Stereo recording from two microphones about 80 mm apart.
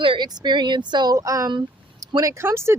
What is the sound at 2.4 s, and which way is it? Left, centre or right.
Speech, right.